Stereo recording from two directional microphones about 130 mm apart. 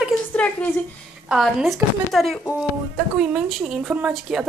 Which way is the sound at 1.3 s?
Centre (ahead or behind).